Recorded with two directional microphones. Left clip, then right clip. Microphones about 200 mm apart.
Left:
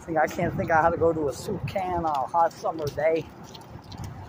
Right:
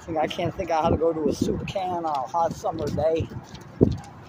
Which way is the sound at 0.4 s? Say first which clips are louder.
Left 1 dB; 15° right (ahead or behind).